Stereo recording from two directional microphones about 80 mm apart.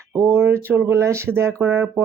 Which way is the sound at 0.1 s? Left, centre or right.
Right.